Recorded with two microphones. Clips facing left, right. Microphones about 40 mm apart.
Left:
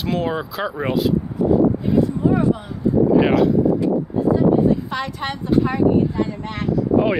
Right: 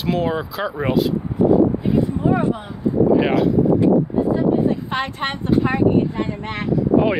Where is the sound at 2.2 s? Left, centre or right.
Right.